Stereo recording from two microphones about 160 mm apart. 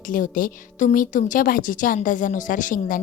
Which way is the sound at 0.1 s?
60° left (ahead or behind).